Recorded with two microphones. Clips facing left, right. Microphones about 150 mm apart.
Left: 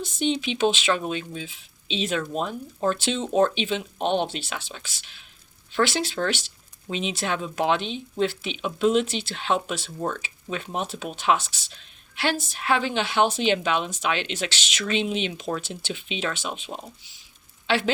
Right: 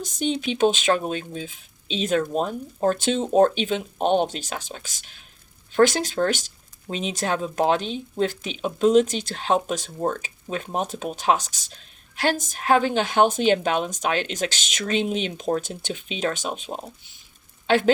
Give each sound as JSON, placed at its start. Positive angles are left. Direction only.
{"t": 0.0, "sound": "a woman's voice", "side_deg": -40}